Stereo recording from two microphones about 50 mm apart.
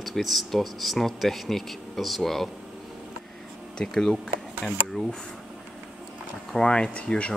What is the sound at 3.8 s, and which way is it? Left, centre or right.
Speech, centre.